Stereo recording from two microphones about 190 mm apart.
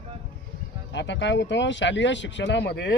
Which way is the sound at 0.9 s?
70° left (ahead or behind).